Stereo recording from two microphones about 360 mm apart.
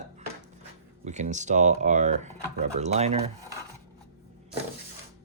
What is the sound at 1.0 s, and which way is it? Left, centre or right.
Speech, centre.